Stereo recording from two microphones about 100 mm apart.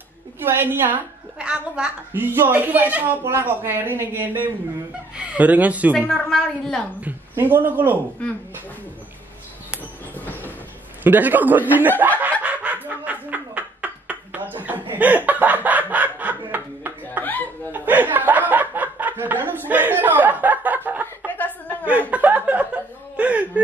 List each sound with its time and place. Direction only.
0.4 s a woman's voice: 25° right (ahead or behind)
6.0 s a woman's voice: 5° left (ahead or behind)
7.0 s a woman's voice: 15° right (ahead or behind)
8.2 s speech: 10° left (ahead or behind)
10.1 s train: 20° left (ahead or behind)
11.1 s speech: 15° right (ahead or behind)
12.0 s snicker: 20° right (ahead or behind)
17.2 s chuckle: 15° left (ahead or behind)
17.7 s snicker: 20° right (ahead or behind)
21.3 s a sound: 15° left (ahead or behind)
21.6 s chuckle: 15° right (ahead or behind)
22.1 s speech: 15° right (ahead or behind)